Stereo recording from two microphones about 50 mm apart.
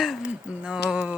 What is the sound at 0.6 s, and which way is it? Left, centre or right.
Speech, centre.